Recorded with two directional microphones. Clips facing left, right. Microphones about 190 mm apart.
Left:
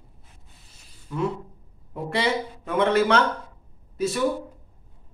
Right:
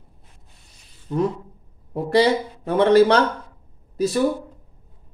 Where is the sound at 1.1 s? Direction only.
30° right (ahead or behind).